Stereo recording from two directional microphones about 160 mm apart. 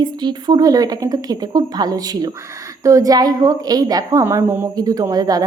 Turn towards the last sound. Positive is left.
turn(degrees=-25)  # may be behind; listen again after turning